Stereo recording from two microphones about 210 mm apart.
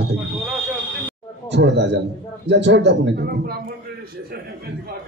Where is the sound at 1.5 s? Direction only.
55° right (ahead or behind).